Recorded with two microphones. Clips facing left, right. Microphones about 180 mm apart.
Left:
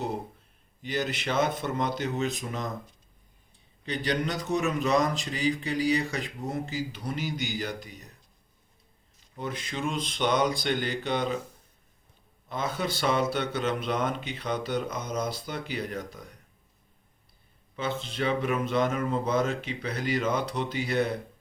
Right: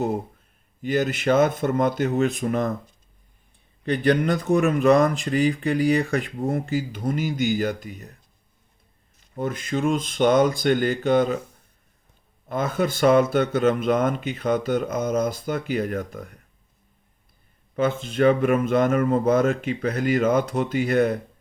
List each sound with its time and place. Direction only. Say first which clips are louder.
0.8 s speech: right 8 dB; 50° right (ahead or behind)
3.8 s speech: right 9 dB; 55° right (ahead or behind)
9.2 s speech: right 7 dB; 50° right (ahead or behind)
12.5 s speech: right 7 dB; 50° right (ahead or behind)
17.7 s speech: right 9 dB; 50° right (ahead or behind)